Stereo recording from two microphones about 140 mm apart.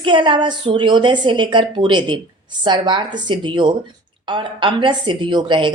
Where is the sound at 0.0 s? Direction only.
35° right (ahead or behind).